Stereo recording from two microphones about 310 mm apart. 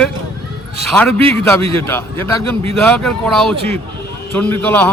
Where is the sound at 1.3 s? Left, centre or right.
Centre.